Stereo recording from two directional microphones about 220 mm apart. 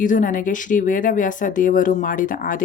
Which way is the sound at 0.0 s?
35° left (ahead or behind).